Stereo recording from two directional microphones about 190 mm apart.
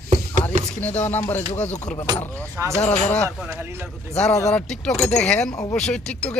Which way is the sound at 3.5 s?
10° right (ahead or behind).